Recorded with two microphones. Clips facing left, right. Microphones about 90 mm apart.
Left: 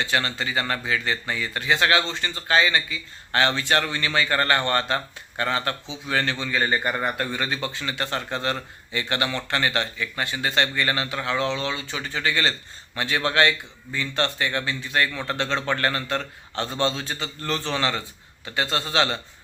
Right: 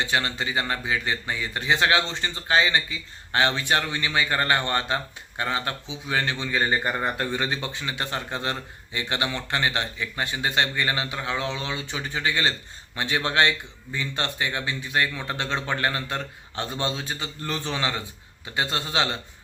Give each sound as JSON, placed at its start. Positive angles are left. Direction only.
{"t": 0.0, "sound": "speech", "side_deg": -15}